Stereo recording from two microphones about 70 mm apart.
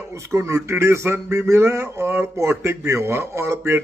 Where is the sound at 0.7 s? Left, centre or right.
Right.